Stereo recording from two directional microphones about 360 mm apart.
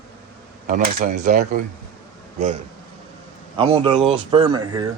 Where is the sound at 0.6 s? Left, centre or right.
Right.